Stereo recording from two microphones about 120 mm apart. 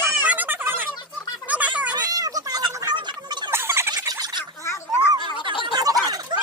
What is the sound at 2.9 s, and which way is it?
Gargling, 40° right (ahead or behind).